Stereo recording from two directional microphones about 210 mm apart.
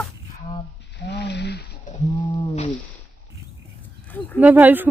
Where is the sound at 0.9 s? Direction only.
55° left (ahead or behind).